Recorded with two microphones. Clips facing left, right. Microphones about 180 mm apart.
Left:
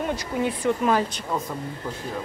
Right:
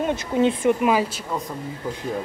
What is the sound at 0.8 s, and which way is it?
Speech, 10° right (ahead or behind).